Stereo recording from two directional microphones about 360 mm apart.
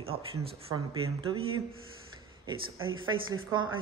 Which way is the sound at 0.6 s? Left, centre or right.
Centre.